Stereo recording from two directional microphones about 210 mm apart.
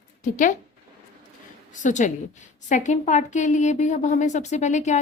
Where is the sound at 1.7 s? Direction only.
35° left (ahead or behind).